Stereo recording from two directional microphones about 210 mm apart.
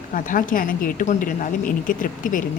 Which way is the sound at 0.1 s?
40° left (ahead or behind).